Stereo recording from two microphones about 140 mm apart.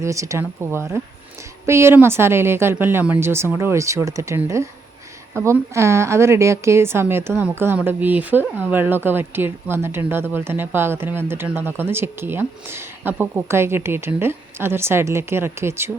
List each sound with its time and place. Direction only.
0.0 s speech: 20° right (ahead or behind)